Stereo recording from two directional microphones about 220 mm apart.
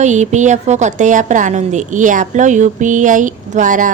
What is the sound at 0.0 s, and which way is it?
A woman's voice, 35° right (ahead or behind).